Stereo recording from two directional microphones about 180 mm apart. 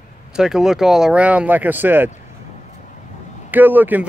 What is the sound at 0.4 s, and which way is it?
Speech, 5° right (ahead or behind).